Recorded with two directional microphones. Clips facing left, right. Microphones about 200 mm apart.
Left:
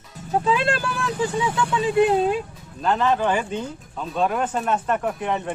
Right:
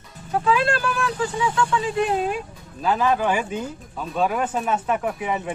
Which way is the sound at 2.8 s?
5° right (ahead or behind).